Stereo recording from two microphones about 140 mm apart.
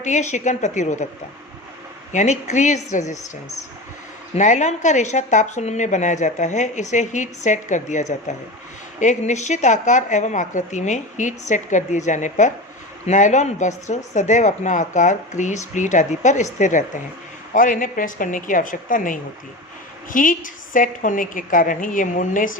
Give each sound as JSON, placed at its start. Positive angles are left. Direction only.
{"t": 0.0, "sound": "speech", "side_deg": 60}
{"t": 2.1, "sound": "speech", "side_deg": 55}
{"t": 4.4, "sound": "speech", "side_deg": 60}
{"t": 17.5, "sound": "a woman's voice", "side_deg": 70}